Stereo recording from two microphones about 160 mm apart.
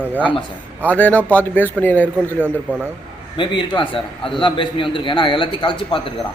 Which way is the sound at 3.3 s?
30° left (ahead or behind).